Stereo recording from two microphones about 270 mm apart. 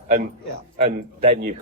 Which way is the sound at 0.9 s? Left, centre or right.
Right.